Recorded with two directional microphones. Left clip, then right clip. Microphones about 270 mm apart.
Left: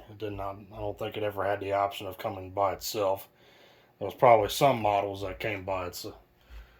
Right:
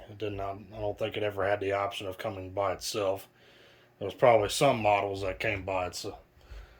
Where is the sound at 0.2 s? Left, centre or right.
Centre.